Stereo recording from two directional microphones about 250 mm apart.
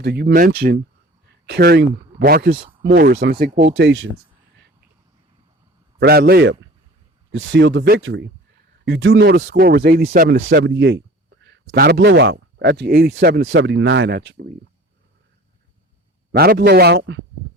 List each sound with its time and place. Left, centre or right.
0.0 s speech: right
6.0 s speech: right
16.3 s speech: right